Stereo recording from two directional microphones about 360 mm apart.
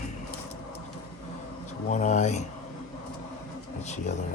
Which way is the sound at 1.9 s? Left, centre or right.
Centre.